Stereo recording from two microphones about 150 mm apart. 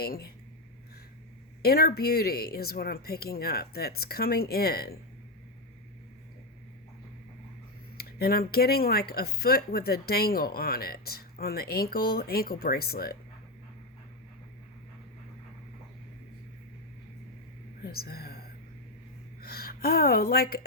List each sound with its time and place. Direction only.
0.0 s speech: 90° left
1.6 s speech: 90° left
7.9 s speech: 90° left
17.8 s a sound: 90° left
19.4 s speech: 90° left